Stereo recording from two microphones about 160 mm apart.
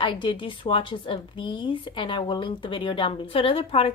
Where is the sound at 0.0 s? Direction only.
30° left (ahead or behind).